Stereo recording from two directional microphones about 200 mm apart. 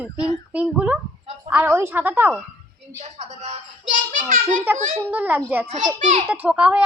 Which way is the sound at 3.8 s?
40° right (ahead or behind).